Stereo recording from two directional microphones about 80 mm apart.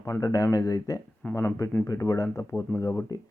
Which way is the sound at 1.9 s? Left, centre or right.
Left.